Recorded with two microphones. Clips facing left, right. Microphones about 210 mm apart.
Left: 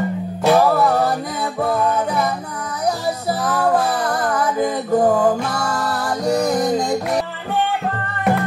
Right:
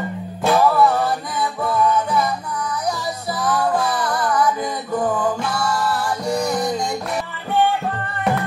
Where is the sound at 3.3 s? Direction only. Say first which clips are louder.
Left 2 dB; 45° left (ahead or behind).